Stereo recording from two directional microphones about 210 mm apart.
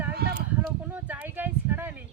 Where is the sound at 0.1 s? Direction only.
50° right (ahead or behind).